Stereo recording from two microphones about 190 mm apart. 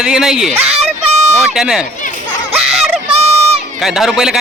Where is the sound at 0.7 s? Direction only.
35° right (ahead or behind).